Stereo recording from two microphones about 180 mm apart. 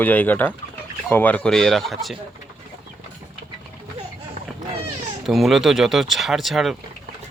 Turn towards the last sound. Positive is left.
turn(degrees=0)  # may be behind; listen again after turning